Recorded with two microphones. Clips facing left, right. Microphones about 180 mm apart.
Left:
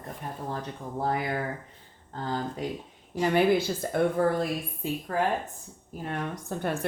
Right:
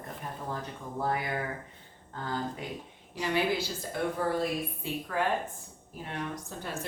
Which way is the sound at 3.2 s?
50° left (ahead or behind).